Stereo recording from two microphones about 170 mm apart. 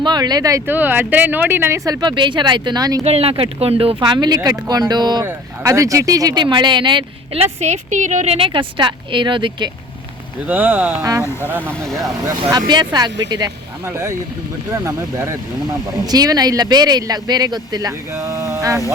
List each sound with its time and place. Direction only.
0.0 s speech: 25° right (ahead or behind)
3.0 s a woman's voice: 35° right (ahead or behind)
7.4 s a woman's voice: 40° right (ahead or behind)
10.4 s speech: 10° right (ahead or behind)
11.9 s speech: centre (ahead or behind)
12.1 s speech: 20° right (ahead or behind)